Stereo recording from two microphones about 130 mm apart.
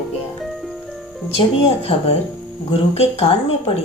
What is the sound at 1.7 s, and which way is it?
Speech, 50° left (ahead or behind).